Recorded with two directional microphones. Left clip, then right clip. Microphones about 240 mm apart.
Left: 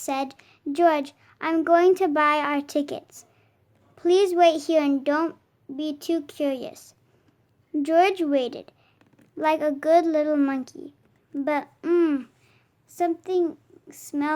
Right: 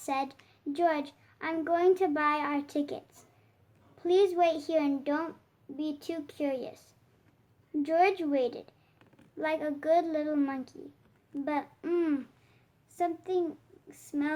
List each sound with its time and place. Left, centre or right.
0.0 s a child's voice: left